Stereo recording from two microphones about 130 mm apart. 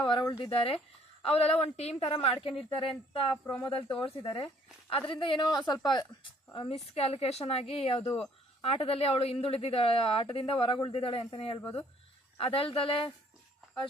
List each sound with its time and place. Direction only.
0.0 s speech: 35° left (ahead or behind)
0.5 s a woman's voice: 50° left (ahead or behind); by 3.7 s 30° left (ahead or behind)
3.7 s a woman's voice: 40° left (ahead or behind)